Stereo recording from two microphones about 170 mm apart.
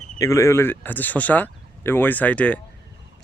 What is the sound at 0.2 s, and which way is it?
Speech, 15° left (ahead or behind).